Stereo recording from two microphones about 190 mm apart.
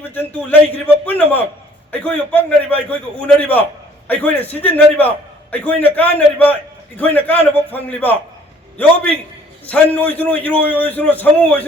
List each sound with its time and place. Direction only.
0.1 s a man's voice: 10° left (ahead or behind)
9.6 s a man's voice: 5° left (ahead or behind)